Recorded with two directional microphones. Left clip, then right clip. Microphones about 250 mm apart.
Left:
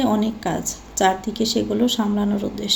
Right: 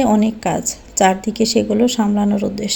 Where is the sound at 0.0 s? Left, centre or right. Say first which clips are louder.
Right 5 dB; right.